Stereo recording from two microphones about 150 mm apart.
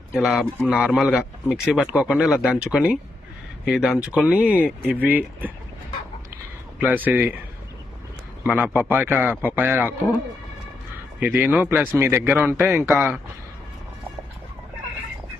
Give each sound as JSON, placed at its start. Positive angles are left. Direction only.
{"t": 0.1, "sound": "speech", "side_deg": 0}
{"t": 6.7, "sound": "speech", "side_deg": -10}
{"t": 8.4, "sound": "speech", "side_deg": -15}
{"t": 11.2, "sound": "speech", "side_deg": -10}